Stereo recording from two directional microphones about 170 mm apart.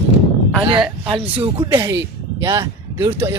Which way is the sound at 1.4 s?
30° right (ahead or behind).